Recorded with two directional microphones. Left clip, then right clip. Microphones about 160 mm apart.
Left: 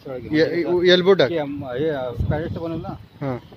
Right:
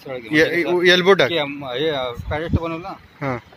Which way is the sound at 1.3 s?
45° left (ahead or behind).